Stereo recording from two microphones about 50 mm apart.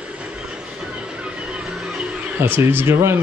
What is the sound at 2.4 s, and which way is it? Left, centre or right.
Speech, right.